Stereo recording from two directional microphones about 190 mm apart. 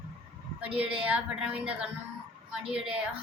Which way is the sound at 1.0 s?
5° right (ahead or behind).